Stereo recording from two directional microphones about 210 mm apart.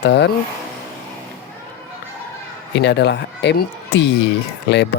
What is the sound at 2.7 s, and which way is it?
Speech, 55° left (ahead or behind).